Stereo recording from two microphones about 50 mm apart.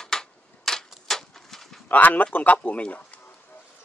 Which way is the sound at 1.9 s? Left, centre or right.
Left.